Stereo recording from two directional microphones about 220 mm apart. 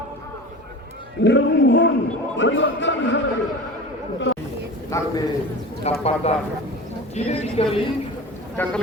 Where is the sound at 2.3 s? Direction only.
55° left (ahead or behind).